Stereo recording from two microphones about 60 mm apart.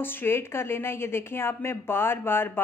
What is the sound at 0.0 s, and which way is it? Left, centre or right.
Speech, left.